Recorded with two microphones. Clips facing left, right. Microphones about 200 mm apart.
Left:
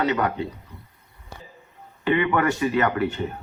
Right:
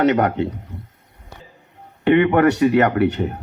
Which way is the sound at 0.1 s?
55° right (ahead or behind).